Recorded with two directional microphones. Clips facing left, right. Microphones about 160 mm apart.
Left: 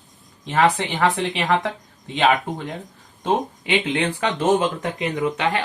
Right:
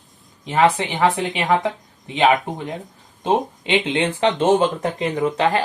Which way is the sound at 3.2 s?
25° right (ahead or behind).